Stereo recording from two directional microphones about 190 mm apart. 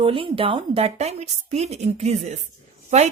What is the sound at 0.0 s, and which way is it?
Speech, 30° right (ahead or behind).